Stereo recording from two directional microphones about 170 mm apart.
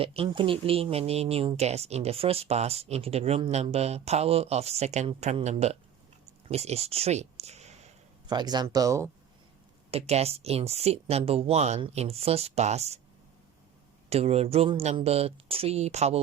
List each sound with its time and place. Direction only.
0.0 s speech: 35° right (ahead or behind)
8.3 s speech: 25° right (ahead or behind)
9.9 s speech: 35° right (ahead or behind)
14.1 s speech: 35° right (ahead or behind)